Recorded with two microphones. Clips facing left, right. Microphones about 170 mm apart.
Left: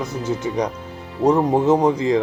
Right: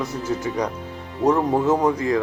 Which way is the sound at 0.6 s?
20° left (ahead or behind).